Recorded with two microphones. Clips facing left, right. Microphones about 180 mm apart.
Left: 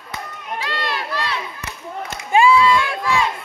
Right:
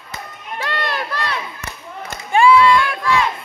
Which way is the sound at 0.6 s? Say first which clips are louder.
Right 3 dB; 55° right (ahead or behind).